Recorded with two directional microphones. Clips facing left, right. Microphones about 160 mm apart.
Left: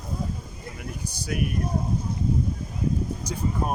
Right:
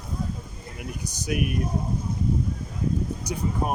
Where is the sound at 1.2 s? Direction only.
15° right (ahead or behind).